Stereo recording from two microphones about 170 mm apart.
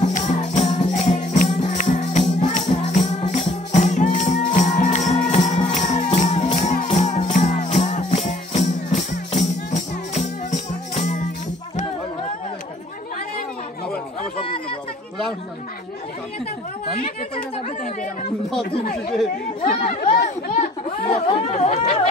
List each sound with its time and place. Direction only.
0.1 s music: 45° left (ahead or behind)
14.4 s a sound: 30° left (ahead or behind)
17.6 s chatter: 40° left (ahead or behind)
19.6 s chatter: 30° left (ahead or behind)
21.1 s chatter: 35° left (ahead or behind)